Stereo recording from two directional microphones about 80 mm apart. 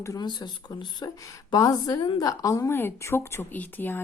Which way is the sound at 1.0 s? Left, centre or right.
Left.